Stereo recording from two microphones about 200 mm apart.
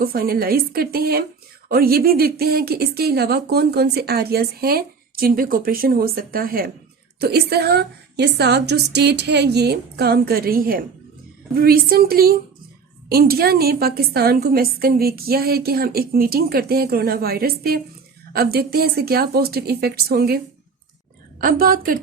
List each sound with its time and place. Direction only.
0.0 s a woman's voice: 50° right (ahead or behind)
21.4 s a woman's voice: 45° right (ahead or behind)